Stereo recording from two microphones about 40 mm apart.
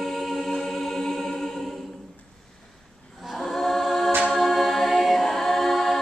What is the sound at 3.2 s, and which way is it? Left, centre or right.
Choir, centre.